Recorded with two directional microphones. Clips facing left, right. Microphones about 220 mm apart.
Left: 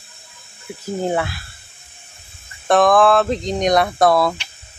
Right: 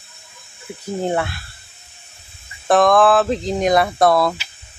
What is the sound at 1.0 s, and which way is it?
Speech, centre (ahead or behind).